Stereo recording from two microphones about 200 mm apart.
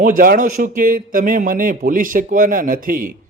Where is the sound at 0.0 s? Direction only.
45° right (ahead or behind).